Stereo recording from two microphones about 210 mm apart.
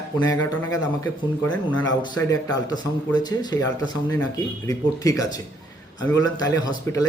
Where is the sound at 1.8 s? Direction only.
20° left (ahead or behind).